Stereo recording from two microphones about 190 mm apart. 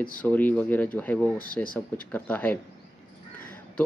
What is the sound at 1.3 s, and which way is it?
Speech, 50° left (ahead or behind).